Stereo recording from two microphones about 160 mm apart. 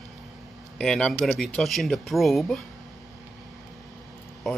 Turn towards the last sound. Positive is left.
turn(degrees=0)  # may be behind; listen again after turning